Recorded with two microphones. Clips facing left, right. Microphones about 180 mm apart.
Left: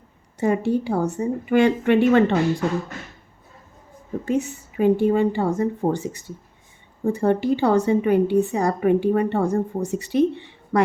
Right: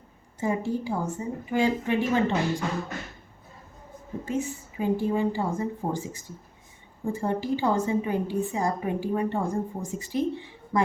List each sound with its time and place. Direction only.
0.3 s a woman's voice: 75° left (ahead or behind)
4.3 s a woman's voice: 70° left (ahead or behind)